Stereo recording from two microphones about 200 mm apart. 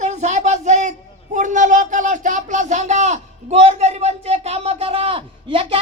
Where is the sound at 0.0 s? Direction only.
35° right (ahead or behind).